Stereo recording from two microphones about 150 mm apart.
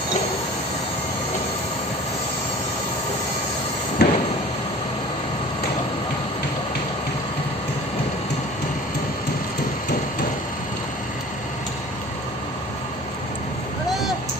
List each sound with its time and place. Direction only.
4.0 s sliding door: 90° left